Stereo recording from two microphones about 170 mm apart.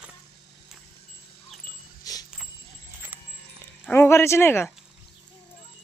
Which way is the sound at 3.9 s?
15° left (ahead or behind).